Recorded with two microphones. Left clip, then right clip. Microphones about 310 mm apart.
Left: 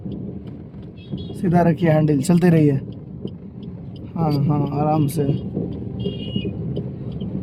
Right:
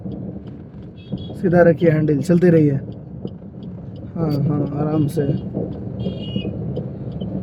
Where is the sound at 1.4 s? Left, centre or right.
Left.